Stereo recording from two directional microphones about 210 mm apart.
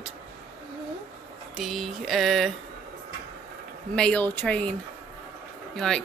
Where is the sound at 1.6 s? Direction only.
Centre (ahead or behind).